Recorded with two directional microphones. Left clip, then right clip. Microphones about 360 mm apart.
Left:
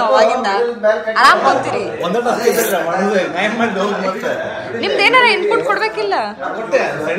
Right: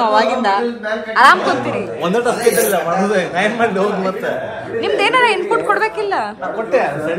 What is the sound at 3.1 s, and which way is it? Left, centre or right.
A man's voice, right.